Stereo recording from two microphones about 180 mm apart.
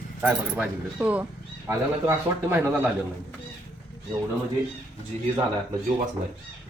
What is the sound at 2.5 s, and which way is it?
Speech, 10° right (ahead or behind).